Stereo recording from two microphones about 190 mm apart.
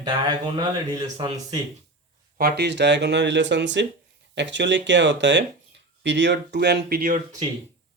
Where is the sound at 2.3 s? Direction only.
55° right (ahead or behind).